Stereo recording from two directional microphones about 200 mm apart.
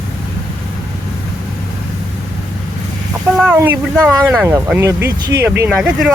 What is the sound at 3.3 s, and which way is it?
Speech, 10° right (ahead or behind).